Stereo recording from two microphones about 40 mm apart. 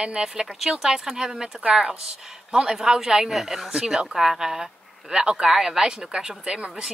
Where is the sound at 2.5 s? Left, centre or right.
Centre.